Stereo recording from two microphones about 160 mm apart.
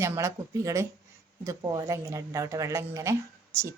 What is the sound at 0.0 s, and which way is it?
A woman's voice, 20° right (ahead or behind).